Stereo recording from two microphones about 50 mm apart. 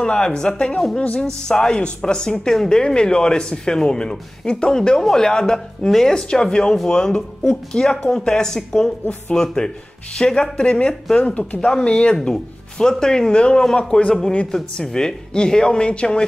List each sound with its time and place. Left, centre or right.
0.0 s speech: centre